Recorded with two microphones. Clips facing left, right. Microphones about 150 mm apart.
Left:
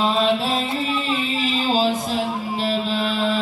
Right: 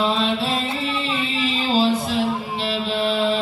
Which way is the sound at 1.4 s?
45° left (ahead or behind).